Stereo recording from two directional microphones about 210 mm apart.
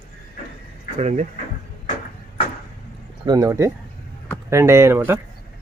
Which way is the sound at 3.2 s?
15° right (ahead or behind).